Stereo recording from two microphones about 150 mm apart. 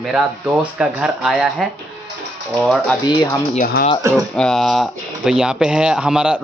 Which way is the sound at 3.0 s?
30° left (ahead or behind).